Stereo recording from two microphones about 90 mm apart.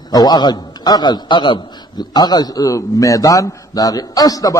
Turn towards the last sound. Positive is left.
turn(degrees=40)  # may be behind; listen again after turning